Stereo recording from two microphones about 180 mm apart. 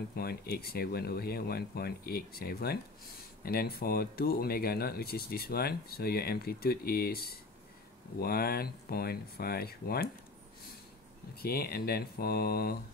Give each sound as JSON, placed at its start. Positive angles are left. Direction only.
{"t": 0.1, "sound": "speech", "side_deg": 60}
{"t": 11.3, "sound": "speech", "side_deg": 55}